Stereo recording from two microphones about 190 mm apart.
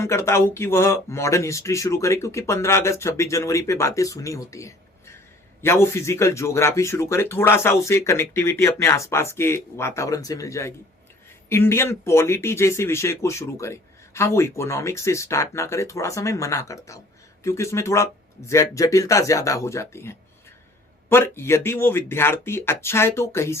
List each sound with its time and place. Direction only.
0.0 s speech: 15° left (ahead or behind)